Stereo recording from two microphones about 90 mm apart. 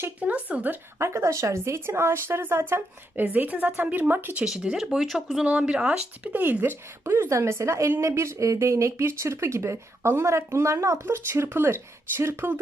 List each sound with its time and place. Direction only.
0.0 s speech: 15° right (ahead or behind)
0.9 s speech: 30° right (ahead or behind)
4.4 s speech: 5° right (ahead or behind); by 12.5 s 30° right (ahead or behind)